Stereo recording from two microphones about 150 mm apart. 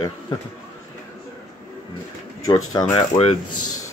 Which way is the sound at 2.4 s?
25° left (ahead or behind).